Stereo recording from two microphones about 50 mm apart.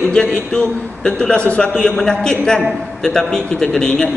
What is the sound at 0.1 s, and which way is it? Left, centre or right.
A man's voice, centre.